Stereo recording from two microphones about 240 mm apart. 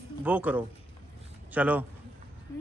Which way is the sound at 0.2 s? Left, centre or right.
Centre.